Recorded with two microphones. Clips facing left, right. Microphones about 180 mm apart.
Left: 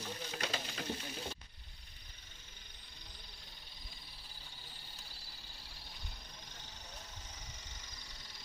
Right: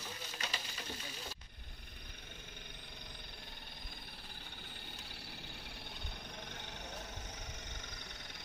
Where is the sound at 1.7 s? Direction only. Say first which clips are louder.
Right 8 dB; 55° right (ahead or behind).